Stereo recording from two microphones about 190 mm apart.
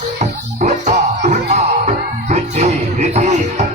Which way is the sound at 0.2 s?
35° right (ahead or behind).